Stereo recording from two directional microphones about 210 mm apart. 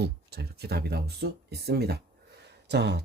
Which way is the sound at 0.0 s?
50° right (ahead or behind).